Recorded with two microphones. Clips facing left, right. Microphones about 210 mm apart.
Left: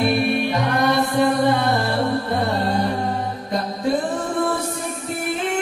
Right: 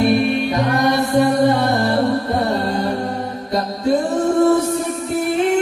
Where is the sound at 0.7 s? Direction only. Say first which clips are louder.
Right 3 dB; 45° right (ahead or behind).